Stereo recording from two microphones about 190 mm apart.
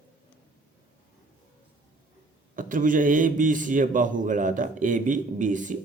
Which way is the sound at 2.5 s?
45° right (ahead or behind).